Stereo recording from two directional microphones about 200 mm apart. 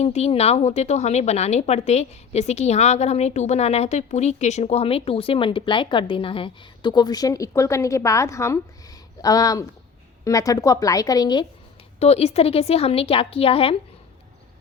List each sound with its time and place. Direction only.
0.0 s a woman's voice: 30° left (ahead or behind)
11.9 s a woman's voice: 30° left (ahead or behind)